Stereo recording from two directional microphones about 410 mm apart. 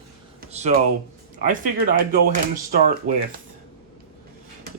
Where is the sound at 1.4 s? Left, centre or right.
Centre.